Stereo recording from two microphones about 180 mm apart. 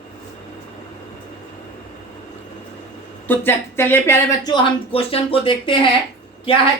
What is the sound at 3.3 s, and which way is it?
A woman's voice, 10° left (ahead or behind).